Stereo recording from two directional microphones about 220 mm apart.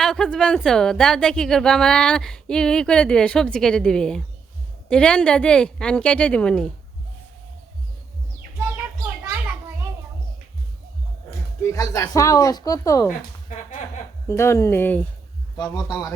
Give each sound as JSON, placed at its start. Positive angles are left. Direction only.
{"t": 0.0, "sound": "a woman's voice", "side_deg": 5}
{"t": 11.6, "sound": "speech", "side_deg": 15}
{"t": 13.5, "sound": "speech", "side_deg": 35}
{"t": 14.3, "sound": "speech", "side_deg": 10}